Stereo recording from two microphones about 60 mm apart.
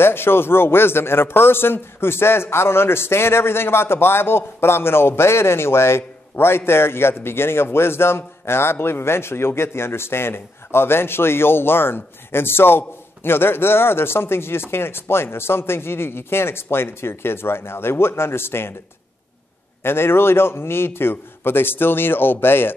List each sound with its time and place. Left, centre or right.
0.0 s a man's voice: left
19.8 s a man's voice: left